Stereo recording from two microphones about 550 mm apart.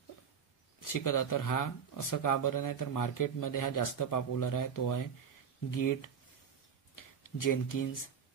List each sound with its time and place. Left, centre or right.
0.7 s speech: left
7.2 s speech: left